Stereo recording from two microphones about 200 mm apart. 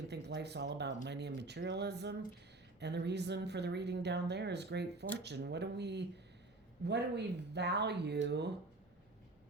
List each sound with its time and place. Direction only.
0.1 s speech: 55° right (ahead or behind)